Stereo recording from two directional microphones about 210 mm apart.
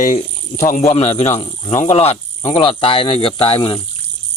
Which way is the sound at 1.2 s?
30° left (ahead or behind).